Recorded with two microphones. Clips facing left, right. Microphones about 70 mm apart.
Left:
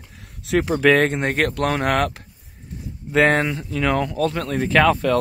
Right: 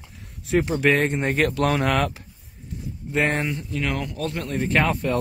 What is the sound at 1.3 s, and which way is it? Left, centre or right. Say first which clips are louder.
Speech: even; left.